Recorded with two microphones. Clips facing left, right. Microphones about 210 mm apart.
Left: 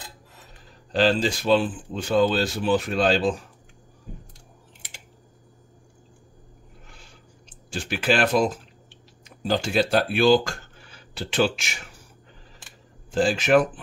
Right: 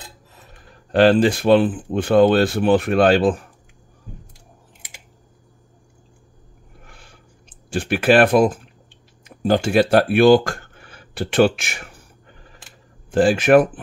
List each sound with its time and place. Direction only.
0.7 s speech: 60° right (ahead or behind)
6.9 s a sound: 55° right (ahead or behind)
9.2 s speech: 55° right (ahead or behind)
13.1 s speech: 60° right (ahead or behind)